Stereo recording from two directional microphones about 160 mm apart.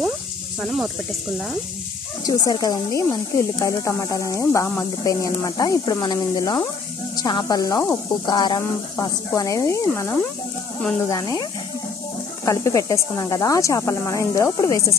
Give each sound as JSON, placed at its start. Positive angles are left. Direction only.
{"t": 0.6, "sound": "speech", "side_deg": 0}
{"t": 2.2, "sound": "speech", "side_deg": 25}
{"t": 12.4, "sound": "speech", "side_deg": 20}